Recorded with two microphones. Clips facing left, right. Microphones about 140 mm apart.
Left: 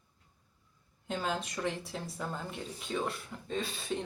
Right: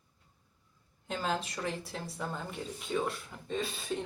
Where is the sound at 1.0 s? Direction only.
Centre (ahead or behind).